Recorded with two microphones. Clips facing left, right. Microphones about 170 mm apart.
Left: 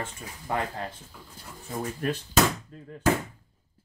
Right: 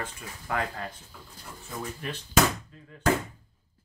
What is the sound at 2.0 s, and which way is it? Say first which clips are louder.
Speech: left 11 dB; 45° left (ahead or behind).